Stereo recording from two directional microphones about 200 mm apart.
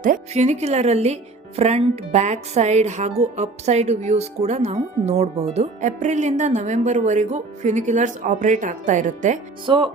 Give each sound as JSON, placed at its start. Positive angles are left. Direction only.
{"t": 0.0, "sound": "speech", "side_deg": -40}
{"t": 9.6, "sound": "music", "side_deg": -25}